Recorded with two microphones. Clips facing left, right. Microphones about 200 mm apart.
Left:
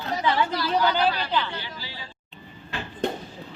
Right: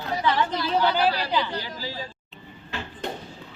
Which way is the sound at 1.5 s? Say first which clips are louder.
Right 5 dB; 40° right (ahead or behind).